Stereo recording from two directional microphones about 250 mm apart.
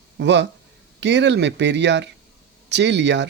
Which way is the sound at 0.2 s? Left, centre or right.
Right.